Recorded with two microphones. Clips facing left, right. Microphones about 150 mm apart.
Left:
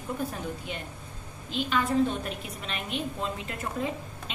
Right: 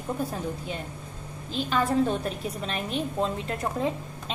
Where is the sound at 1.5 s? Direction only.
40° right (ahead or behind).